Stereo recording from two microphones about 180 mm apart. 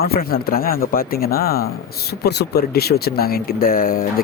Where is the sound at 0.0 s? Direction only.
60° left (ahead or behind).